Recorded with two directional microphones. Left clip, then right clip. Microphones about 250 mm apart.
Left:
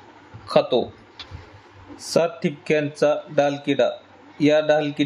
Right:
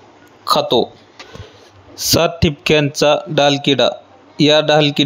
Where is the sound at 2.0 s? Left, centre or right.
Right.